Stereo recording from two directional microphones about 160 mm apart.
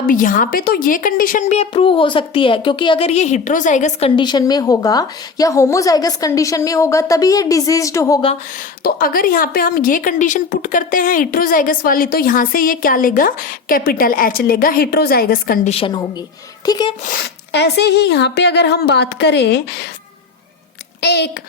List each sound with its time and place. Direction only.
0.1 s speech: 55° left (ahead or behind)
1.7 s a woman's voice: 35° left (ahead or behind)
4.1 s a woman's voice: 30° left (ahead or behind)
8.8 s speech: 65° left (ahead or behind)
16.6 s a woman's voice: 25° left (ahead or behind)
17.1 s speech: 90° left
21.0 s speech: 90° left